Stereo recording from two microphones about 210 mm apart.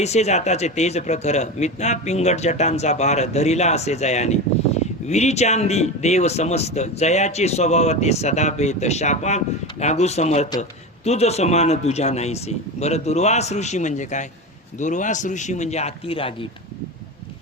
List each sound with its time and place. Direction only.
0.0 s speech: 30° left (ahead or behind)